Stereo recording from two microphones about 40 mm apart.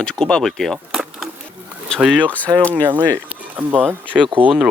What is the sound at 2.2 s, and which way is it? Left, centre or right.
Speech, left.